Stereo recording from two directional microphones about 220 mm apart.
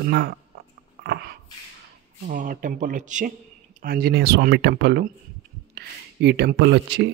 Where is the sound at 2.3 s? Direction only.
35° right (ahead or behind).